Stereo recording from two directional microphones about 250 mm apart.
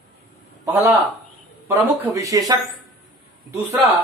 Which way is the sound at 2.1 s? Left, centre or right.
Centre.